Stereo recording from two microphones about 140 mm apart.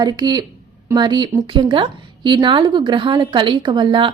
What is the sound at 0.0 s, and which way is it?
A woman's voice, 30° right (ahead or behind).